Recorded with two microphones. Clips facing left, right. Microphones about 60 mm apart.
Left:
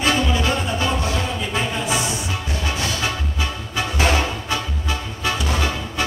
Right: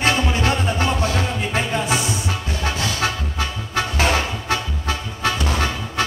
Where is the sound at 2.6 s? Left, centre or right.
Right.